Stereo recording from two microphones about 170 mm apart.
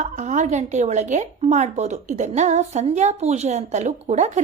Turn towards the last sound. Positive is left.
turn(degrees=-45)  # may be behind; listen again after turning